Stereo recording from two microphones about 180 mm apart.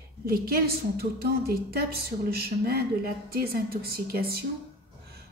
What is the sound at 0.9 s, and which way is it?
Speech, 60° right (ahead or behind).